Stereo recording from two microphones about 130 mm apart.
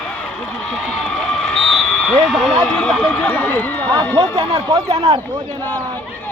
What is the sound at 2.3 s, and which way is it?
Speech, centre (ahead or behind).